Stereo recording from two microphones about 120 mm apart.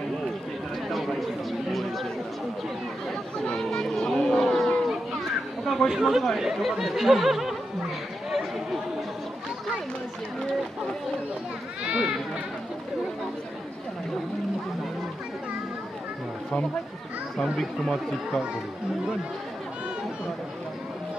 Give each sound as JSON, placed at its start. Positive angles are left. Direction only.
{"t": 0.8, "sound": "chatter", "side_deg": 0}
{"t": 3.3, "sound": "a sound", "side_deg": 5}
{"t": 5.7, "sound": "speech", "side_deg": 0}
{"t": 11.8, "sound": "speech", "side_deg": -5}
{"t": 17.4, "sound": "speech", "side_deg": 5}